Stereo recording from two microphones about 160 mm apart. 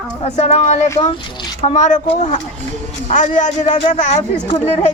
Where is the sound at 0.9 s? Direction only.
20° left (ahead or behind).